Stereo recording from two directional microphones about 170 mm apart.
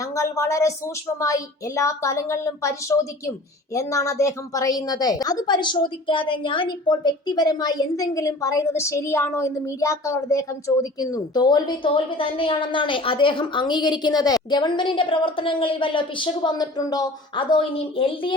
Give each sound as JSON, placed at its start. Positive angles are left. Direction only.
{"t": 0.0, "sound": "a woman's voice", "side_deg": 15}